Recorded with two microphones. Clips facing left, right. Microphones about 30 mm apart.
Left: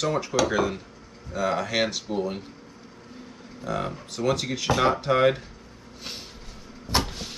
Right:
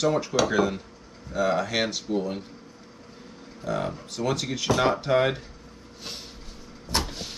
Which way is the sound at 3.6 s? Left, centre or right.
Centre.